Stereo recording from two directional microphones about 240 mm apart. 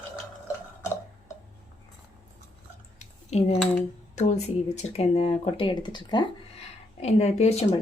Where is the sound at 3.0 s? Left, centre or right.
Left.